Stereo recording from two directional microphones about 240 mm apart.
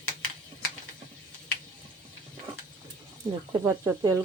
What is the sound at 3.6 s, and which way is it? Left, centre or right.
Speech, centre.